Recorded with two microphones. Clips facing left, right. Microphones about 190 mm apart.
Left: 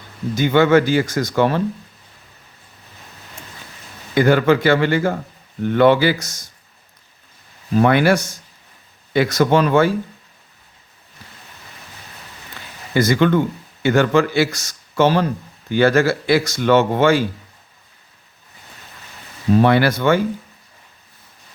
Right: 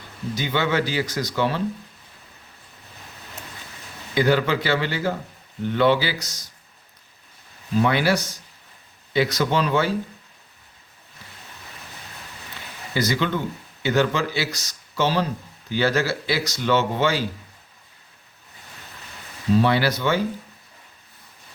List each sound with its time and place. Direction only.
0.3 s speech: 50° left (ahead or behind)
4.1 s speech: 50° left (ahead or behind)
7.8 s speech: 55° left (ahead or behind)
12.9 s speech: 55° left (ahead or behind)
19.5 s speech: 55° left (ahead or behind)